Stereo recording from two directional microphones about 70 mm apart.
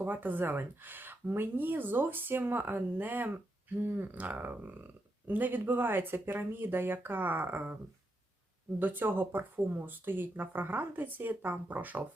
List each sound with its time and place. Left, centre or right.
0.0 s speech: right
8.8 s speech: right